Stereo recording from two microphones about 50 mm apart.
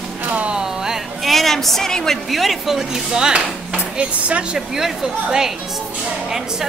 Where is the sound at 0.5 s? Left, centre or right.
Centre.